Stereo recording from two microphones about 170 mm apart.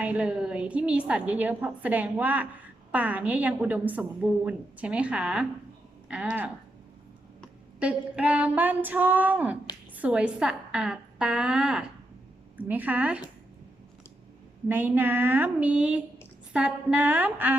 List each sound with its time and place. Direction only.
0.0 s a woman's voice: 5° right (ahead or behind)
7.8 s a woman's voice: 5° right (ahead or behind)
14.7 s a woman's voice: 10° right (ahead or behind)